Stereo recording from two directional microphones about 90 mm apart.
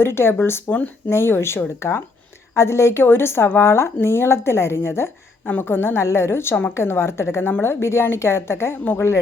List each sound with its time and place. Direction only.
0.0 s a woman's voice: 25° left (ahead or behind)